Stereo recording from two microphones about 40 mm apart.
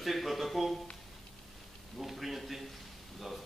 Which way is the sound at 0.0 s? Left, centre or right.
Centre.